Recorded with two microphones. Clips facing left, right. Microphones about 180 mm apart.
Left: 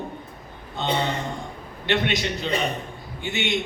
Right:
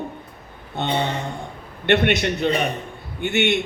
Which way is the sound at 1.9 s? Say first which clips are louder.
Right 5 dB; 60° right (ahead or behind).